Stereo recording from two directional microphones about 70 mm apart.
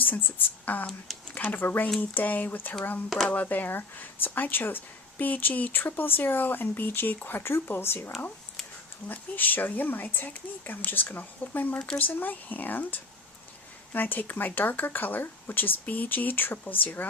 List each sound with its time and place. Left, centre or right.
0.0 s speech: left